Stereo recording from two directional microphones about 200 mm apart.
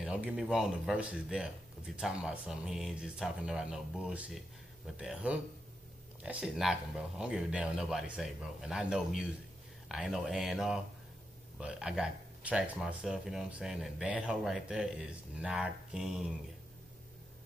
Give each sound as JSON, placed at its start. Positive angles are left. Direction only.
{"t": 0.0, "sound": "speech", "side_deg": -5}